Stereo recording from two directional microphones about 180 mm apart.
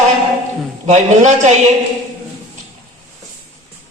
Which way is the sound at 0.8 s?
40° right (ahead or behind).